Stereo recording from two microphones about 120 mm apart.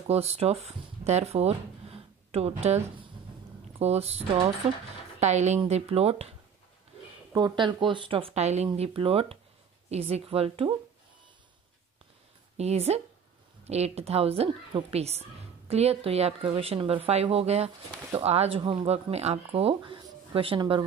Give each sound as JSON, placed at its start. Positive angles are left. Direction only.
{"t": 0.1, "sound": "speech", "side_deg": -60}
{"t": 5.2, "sound": "a woman's voice", "side_deg": -70}
{"t": 5.7, "sound": "speech", "side_deg": -60}
{"t": 7.3, "sound": "speech", "side_deg": -40}
{"t": 8.7, "sound": "speech", "side_deg": -55}
{"t": 12.5, "sound": "speech", "side_deg": -60}
{"t": 15.0, "sound": "speech", "side_deg": -60}
{"t": 18.6, "sound": "speech", "side_deg": -45}